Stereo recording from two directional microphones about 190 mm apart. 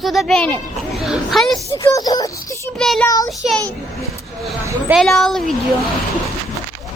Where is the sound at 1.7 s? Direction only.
15° left (ahead or behind).